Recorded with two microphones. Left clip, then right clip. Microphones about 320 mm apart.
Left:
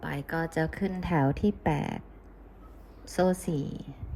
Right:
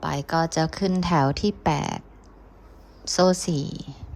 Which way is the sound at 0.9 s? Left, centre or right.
Left.